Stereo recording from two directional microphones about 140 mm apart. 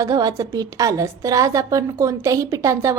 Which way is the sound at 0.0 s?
25° right (ahead or behind).